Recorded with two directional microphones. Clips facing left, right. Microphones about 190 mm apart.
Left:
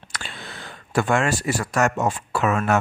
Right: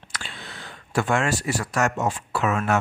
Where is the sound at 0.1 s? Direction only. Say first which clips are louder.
Left 2 dB; 50° left (ahead or behind).